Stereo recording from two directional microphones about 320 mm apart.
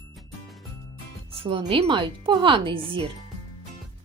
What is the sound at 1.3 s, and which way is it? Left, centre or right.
Speech, centre.